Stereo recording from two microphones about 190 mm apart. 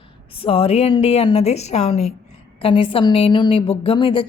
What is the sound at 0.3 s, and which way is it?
A woman's voice, 30° left (ahead or behind).